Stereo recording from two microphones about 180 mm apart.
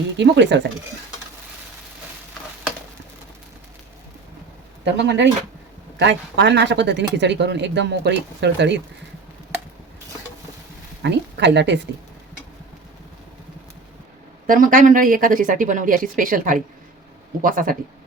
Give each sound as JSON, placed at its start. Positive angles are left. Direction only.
{"t": 0.2, "sound": "speech", "side_deg": -75}
{"t": 4.9, "sound": "speech", "side_deg": -80}
{"t": 11.0, "sound": "speech", "side_deg": -75}
{"t": 14.4, "sound": "speech", "side_deg": -50}